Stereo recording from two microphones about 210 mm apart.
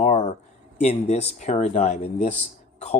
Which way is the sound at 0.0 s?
30° left (ahead or behind).